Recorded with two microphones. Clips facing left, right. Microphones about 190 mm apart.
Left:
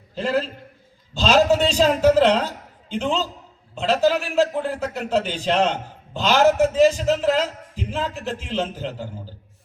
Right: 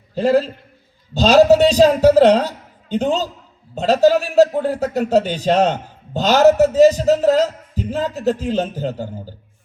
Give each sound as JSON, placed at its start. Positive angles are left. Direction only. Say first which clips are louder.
{"t": 0.1, "sound": "a man's voice", "louder": "right 7 dB", "side_deg": -40}